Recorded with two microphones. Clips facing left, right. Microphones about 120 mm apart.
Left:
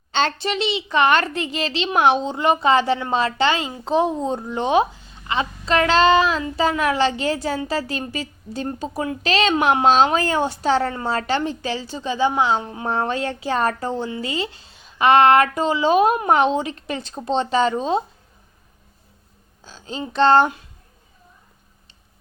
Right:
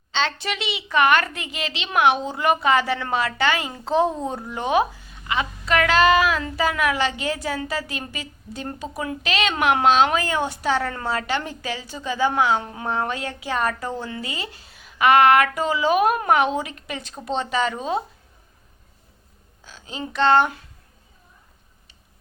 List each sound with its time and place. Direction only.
0.1 s a sound: 45° left (ahead or behind)
0.4 s a woman's voice: 30° left (ahead or behind)
19.6 s speech: 30° left (ahead or behind)